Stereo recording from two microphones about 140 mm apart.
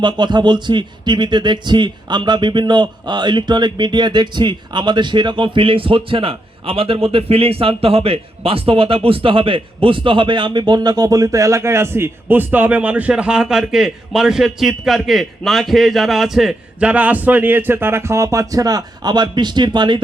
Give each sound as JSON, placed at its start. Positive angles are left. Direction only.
{"t": 0.0, "sound": "a man's voice", "side_deg": -30}